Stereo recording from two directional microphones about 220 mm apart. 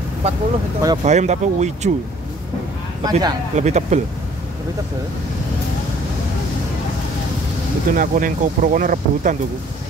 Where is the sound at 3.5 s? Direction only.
30° right (ahead or behind).